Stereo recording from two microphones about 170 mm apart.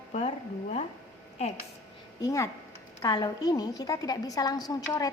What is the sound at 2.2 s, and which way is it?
A woman's voice, 15° left (ahead or behind).